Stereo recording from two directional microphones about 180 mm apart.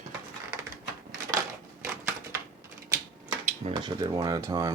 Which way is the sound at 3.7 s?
25° right (ahead or behind).